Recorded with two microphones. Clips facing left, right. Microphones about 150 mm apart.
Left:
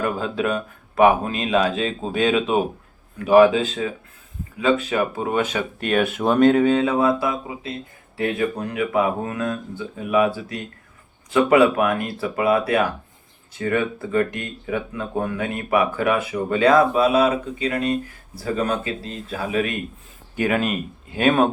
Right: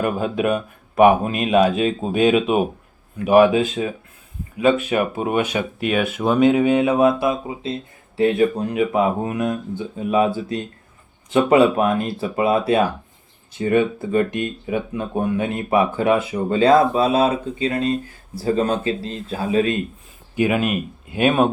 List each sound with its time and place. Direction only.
0.0 s speech: 15° right (ahead or behind)
20.4 s speech: 10° right (ahead or behind)